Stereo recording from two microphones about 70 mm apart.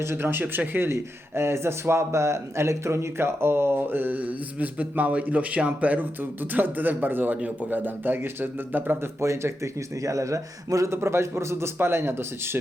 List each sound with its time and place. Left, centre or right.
0.0 s a man's voice: right
9.2 s a man's voice: right
10.9 s a man's voice: right